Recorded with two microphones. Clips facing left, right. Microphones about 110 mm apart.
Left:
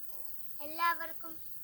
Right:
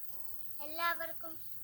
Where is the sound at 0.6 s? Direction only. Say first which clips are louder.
Left 4 dB; 10° right (ahead or behind).